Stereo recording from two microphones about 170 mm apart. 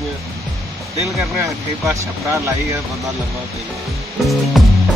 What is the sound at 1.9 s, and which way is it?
Speech, 20° right (ahead or behind).